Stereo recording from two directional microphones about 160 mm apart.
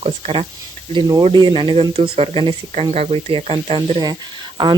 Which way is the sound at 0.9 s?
25° right (ahead or behind).